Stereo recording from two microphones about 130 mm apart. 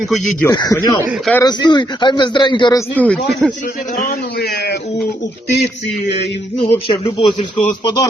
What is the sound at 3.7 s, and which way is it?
Speech, 90° left.